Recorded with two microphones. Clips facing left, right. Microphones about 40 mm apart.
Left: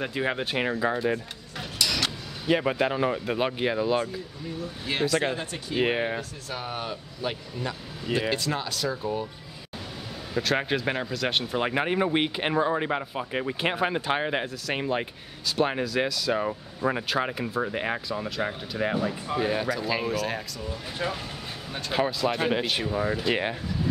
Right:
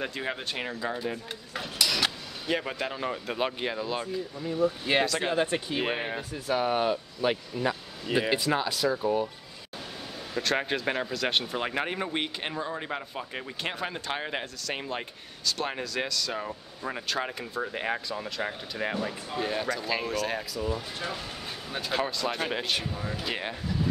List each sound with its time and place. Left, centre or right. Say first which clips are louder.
0.0 s speech: left 5 dB; centre
1.6 s a sound: even; centre
2.4 s speech: left 6 dB; centre
4.6 s speech: right 7 dB; centre
5.0 s speech: left 4 dB; centre
5.3 s speech: right 5 dB; right
5.8 s speech: left 10 dB; centre
6.5 s speech: right 8 dB; centre
10.3 s speech: left 2 dB; centre
11.6 s speech: left 5 dB; centre